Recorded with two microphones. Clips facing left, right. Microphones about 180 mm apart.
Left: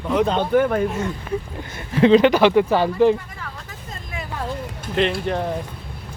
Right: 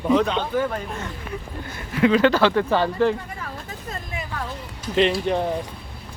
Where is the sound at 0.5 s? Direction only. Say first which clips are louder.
Left 7 dB; 60° left (ahead or behind).